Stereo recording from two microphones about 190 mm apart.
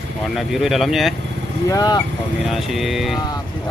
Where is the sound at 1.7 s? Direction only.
20° left (ahead or behind).